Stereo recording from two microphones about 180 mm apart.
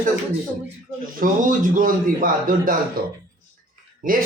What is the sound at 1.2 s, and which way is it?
A man's voice, 45° right (ahead or behind).